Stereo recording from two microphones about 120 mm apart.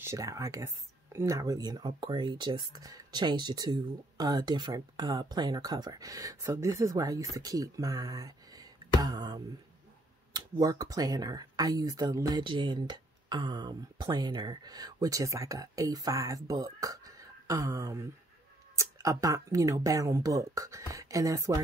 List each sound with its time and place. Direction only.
0.0 s speech: 25° right (ahead or behind)